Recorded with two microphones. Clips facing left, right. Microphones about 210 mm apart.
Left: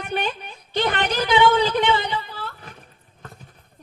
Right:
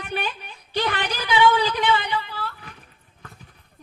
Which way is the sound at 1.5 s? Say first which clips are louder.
Left 3 dB; 25° left (ahead or behind).